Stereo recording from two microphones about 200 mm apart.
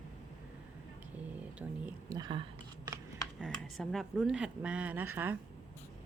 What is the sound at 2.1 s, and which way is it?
Speech, 25° right (ahead or behind).